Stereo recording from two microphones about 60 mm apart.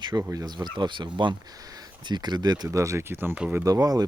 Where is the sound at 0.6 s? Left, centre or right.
Right.